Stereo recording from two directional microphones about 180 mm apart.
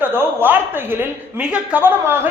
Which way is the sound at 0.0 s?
10° right (ahead or behind).